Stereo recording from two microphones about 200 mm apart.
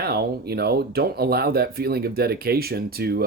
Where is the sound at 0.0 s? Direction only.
50° right (ahead or behind).